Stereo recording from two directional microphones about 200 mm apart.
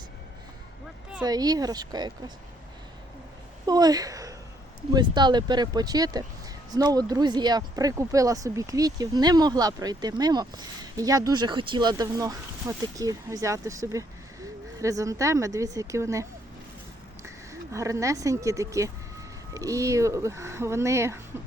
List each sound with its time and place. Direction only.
1.2 s speech: 20° right (ahead or behind)
3.7 s speech: 20° right (ahead or behind)
17.2 s speech: 15° right (ahead or behind)